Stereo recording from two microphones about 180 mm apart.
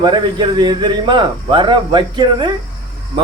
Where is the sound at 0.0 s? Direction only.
25° right (ahead or behind).